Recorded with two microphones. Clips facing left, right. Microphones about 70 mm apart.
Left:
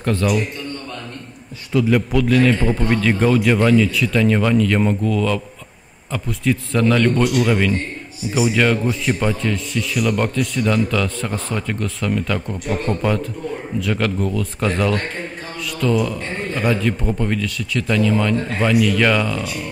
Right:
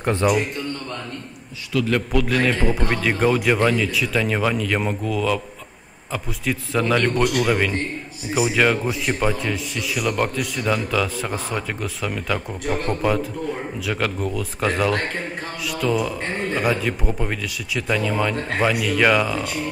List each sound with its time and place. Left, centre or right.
0.0 s a man's voice: centre
1.9 s a man's voice: centre